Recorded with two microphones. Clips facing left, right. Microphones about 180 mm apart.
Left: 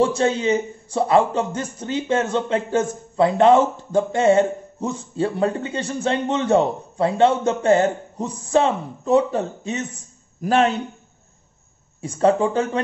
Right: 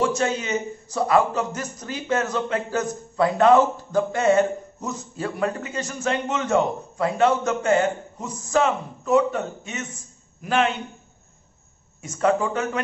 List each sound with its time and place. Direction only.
0.0 s a man's voice: 30° left (ahead or behind)
12.0 s speech: 30° left (ahead or behind)